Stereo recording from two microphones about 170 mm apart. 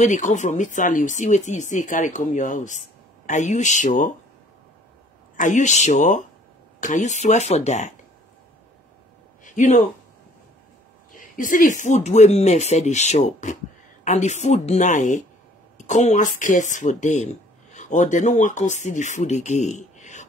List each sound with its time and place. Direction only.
0.0 s speech: 45° left (ahead or behind)
5.4 s speech: 45° left (ahead or behind)
9.4 s a sound: 45° left (ahead or behind)
11.1 s speech: 50° left (ahead or behind)